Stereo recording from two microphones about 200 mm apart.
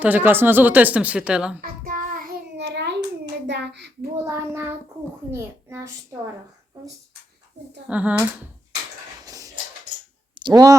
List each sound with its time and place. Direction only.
0.0 s a woman's voice: 10° right (ahead or behind)
1.6 s child singing: 45° right (ahead or behind)
2.6 s child singing: 60° right (ahead or behind)
3.4 s a child's voice: 60° right (ahead or behind)
4.3 s a woman's voice: 10° right (ahead or behind)
7.9 s a woman's voice: 5° right (ahead or behind)
9.2 s a sound: 15° right (ahead or behind)
10.4 s a woman's voice: 20° right (ahead or behind)